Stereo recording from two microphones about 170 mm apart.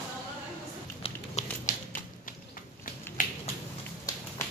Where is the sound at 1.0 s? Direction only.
40° left (ahead or behind).